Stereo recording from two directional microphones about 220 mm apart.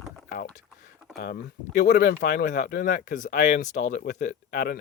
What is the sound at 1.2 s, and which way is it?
Speech, 40° left (ahead or behind).